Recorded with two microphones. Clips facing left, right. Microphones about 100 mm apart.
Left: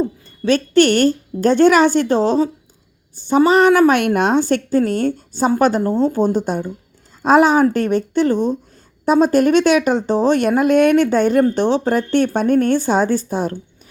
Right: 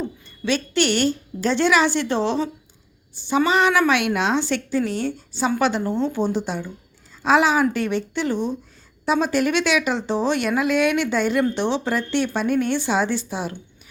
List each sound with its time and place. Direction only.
0.0 s a woman's voice: 40° left (ahead or behind)